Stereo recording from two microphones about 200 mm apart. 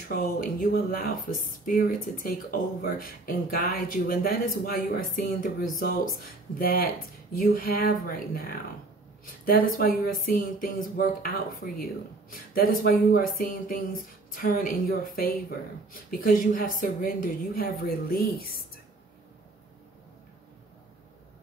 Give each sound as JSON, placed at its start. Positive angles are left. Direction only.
{"t": 0.1, "sound": "speech", "side_deg": 45}
{"t": 9.2, "sound": "a sound", "side_deg": 45}
{"t": 9.8, "sound": "speech", "side_deg": 45}